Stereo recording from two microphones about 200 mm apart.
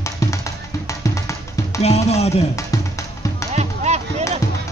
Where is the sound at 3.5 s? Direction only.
35° right (ahead or behind).